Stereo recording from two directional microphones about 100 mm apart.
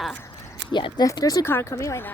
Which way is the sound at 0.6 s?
55° left (ahead or behind).